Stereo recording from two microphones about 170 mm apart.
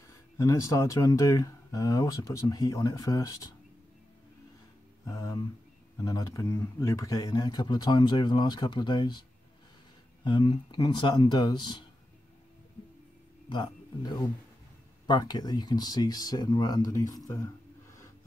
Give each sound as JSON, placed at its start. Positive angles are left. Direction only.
{"t": 0.4, "sound": "speech", "side_deg": 20}
{"t": 5.0, "sound": "speech", "side_deg": 20}
{"t": 10.2, "sound": "speech", "side_deg": 25}
{"t": 13.5, "sound": "speech", "side_deg": 25}